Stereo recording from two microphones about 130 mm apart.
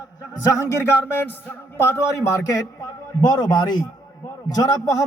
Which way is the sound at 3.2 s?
35° left (ahead or behind).